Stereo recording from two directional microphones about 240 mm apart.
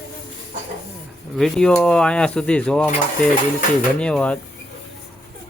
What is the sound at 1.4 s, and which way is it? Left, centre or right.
Speech, centre.